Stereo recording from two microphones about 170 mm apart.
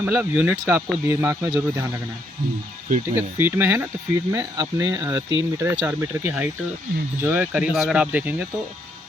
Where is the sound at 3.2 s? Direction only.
10° right (ahead or behind).